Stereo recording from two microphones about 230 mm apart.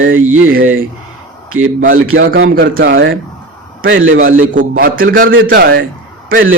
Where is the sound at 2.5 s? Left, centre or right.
Right.